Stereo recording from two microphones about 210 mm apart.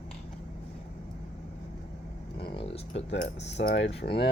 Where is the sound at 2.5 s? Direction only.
25° left (ahead or behind).